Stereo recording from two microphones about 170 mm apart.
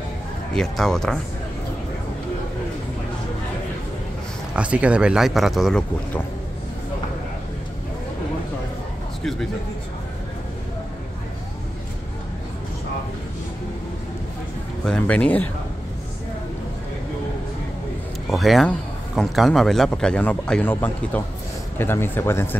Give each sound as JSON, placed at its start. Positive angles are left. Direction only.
{"t": 0.5, "sound": "speech", "side_deg": 5}
{"t": 4.6, "sound": "speech", "side_deg": -5}
{"t": 14.9, "sound": "speech", "side_deg": 5}
{"t": 18.3, "sound": "speech", "side_deg": 0}